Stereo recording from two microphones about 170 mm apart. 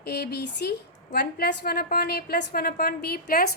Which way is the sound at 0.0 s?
70° left (ahead or behind).